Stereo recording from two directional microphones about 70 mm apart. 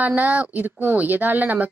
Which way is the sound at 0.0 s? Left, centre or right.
Right.